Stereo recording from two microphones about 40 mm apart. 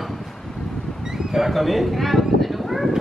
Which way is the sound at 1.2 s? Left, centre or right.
Centre.